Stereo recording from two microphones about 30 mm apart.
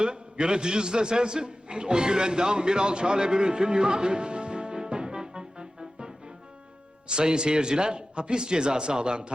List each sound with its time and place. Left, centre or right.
0.0 s a man's voice: right
7.1 s a man's voice: right